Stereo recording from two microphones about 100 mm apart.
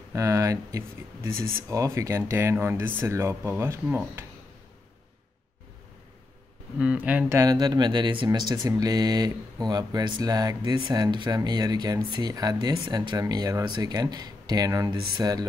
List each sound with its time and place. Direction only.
0.1 s speech: 30° right (ahead or behind)
6.8 s speech: 15° right (ahead or behind)
7.4 s speech: 45° right (ahead or behind)